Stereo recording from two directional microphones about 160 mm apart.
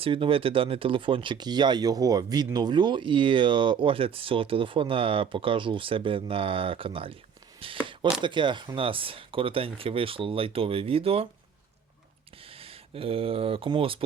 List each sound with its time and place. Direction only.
0.0 s speech: 35° right (ahead or behind)
12.5 s speech: 35° right (ahead or behind)